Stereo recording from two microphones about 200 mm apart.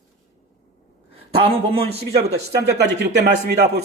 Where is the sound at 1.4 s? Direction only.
30° right (ahead or behind).